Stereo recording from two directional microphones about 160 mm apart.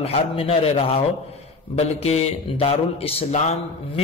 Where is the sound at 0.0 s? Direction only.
40° left (ahead or behind).